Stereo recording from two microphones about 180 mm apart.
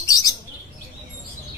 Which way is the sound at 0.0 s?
20° left (ahead or behind).